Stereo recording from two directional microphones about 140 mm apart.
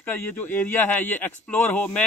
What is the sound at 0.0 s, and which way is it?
Speech, 15° left (ahead or behind).